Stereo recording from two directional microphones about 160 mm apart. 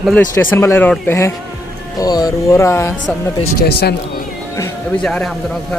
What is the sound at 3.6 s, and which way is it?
Speech, 80° left.